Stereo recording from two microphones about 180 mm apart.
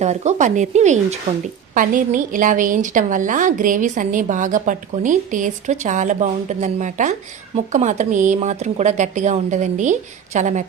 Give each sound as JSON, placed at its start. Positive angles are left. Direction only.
{"t": 0.0, "sound": "a woman's voice", "side_deg": -40}